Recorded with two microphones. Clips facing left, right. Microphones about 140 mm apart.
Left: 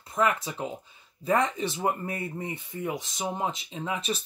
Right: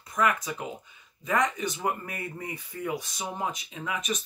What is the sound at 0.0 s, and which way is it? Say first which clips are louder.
Speech: left 1 dB; 25° left (ahead or behind).